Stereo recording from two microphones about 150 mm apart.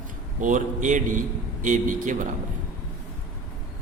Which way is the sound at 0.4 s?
55° right (ahead or behind).